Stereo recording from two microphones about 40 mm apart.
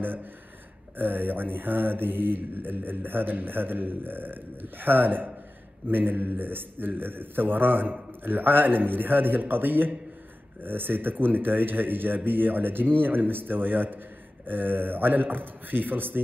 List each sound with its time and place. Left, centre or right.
0.9 s mantra: right
14.4 s speech: right